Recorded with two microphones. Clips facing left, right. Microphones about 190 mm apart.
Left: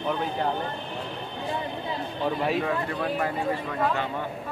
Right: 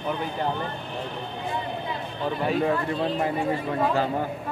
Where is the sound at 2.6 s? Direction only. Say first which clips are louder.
Right 3 dB; 25° right (ahead or behind).